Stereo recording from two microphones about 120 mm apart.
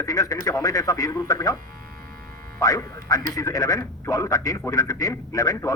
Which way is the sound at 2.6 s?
30° left (ahead or behind).